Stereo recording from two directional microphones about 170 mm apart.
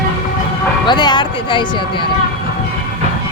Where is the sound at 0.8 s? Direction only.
25° left (ahead or behind).